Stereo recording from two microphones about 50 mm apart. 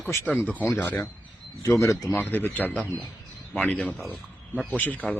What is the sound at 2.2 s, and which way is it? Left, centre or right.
Speech, left.